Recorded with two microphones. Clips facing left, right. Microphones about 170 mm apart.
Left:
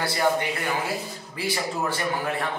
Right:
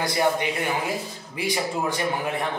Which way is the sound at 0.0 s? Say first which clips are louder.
Right 1 dB; 15° right (ahead or behind).